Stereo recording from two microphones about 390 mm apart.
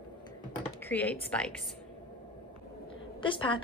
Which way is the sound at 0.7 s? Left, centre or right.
Centre.